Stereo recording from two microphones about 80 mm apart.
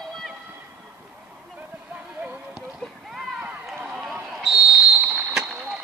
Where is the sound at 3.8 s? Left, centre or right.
Centre.